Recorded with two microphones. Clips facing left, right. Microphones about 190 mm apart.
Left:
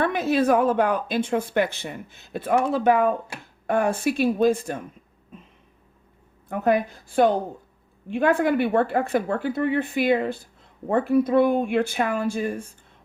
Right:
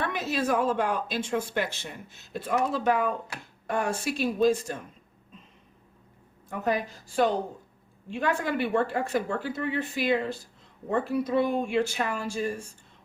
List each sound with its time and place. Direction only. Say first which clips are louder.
0.0 s speech: left 8 dB; 55° left (ahead or behind)
6.5 s speech: left 7 dB; 55° left (ahead or behind)